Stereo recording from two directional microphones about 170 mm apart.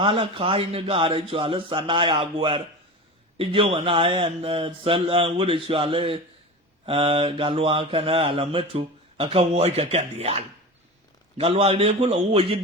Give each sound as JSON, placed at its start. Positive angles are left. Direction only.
{"t": 0.0, "sound": "speech", "side_deg": -30}